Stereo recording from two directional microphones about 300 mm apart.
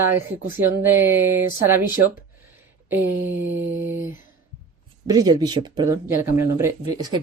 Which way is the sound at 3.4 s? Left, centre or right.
Right.